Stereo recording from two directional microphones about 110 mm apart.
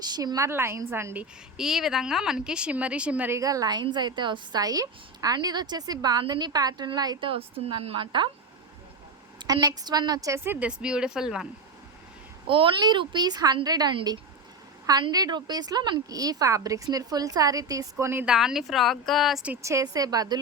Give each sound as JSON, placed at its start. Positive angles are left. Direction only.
{"t": 0.1, "sound": "a woman's voice", "side_deg": -35}
{"t": 1.2, "sound": "speech", "side_deg": -5}
{"t": 3.3, "sound": "a woman's voice", "side_deg": -35}
{"t": 7.3, "sound": "a woman's voice", "side_deg": -60}
{"t": 9.4, "sound": "a woman's voice", "side_deg": -40}
{"t": 12.5, "sound": "a woman's voice", "side_deg": -50}
{"t": 17.9, "sound": "a woman's voice", "side_deg": -20}
{"t": 18.3, "sound": "speech", "side_deg": -5}
{"t": 19.6, "sound": "a woman's voice", "side_deg": -30}